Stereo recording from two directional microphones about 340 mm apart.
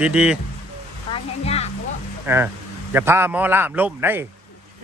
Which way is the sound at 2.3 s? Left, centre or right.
Centre.